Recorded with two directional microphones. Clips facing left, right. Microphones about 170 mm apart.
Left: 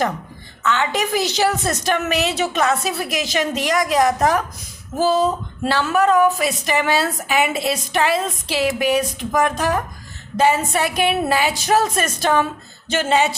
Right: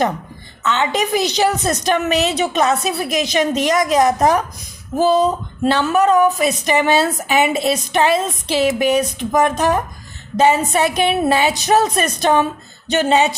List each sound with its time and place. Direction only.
0.6 s speech: 20° right (ahead or behind)